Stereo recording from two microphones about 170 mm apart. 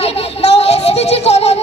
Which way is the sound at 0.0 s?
35° left (ahead or behind).